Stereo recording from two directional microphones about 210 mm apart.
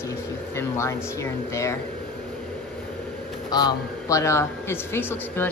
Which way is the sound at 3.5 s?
20° left (ahead or behind).